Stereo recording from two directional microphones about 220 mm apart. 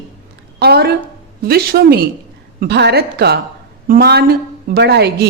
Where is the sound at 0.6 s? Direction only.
45° right (ahead or behind).